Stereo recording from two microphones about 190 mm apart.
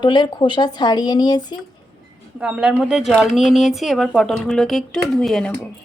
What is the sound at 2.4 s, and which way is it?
Speech, 5° right (ahead or behind).